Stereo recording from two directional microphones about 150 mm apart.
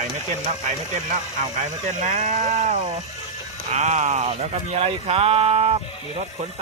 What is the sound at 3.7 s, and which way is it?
Speech, 50° right (ahead or behind).